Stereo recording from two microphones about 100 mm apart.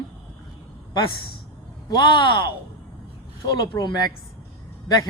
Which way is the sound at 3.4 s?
45° left (ahead or behind).